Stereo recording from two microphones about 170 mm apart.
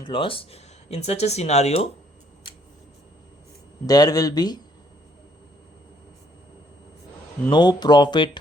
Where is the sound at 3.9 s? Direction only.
20° left (ahead or behind).